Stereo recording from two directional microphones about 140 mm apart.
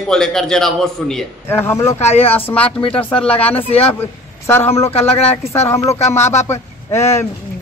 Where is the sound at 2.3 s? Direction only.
15° left (ahead or behind).